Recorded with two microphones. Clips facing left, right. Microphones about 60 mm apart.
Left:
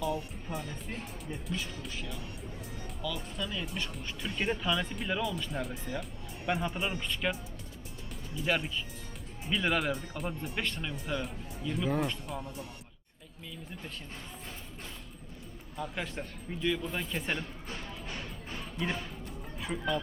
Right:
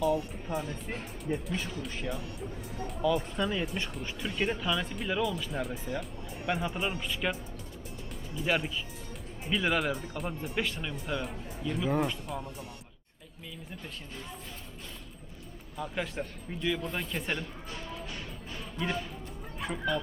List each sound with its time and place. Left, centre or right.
0.4 s speech: centre
1.3 s speech: right
3.8 s speech: centre
4.2 s speech: centre
8.4 s speech: centre
15.8 s speech: centre
18.5 s music: centre